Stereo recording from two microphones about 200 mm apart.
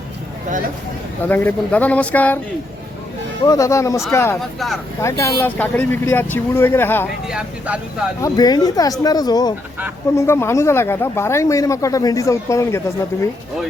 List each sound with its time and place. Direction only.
1.3 s speech: 10° left (ahead or behind)
3.4 s speech: 15° left (ahead or behind)
4.4 s speech: centre (ahead or behind)
4.9 s speech: 15° left (ahead or behind)
7.3 s speech: 5° right (ahead or behind)
8.2 s speech: 20° left (ahead or behind)